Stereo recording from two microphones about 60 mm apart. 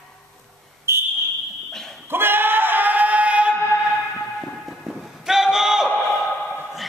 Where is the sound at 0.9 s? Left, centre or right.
Right.